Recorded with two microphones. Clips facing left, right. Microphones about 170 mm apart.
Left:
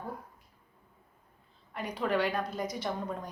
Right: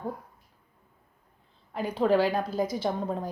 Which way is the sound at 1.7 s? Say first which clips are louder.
Right 7 dB; 30° right (ahead or behind).